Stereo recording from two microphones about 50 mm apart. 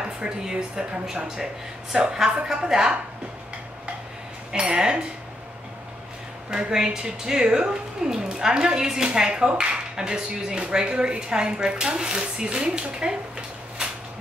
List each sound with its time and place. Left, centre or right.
0.0 s a woman's voice: centre
4.5 s speech: centre
6.5 s a woman's voice: centre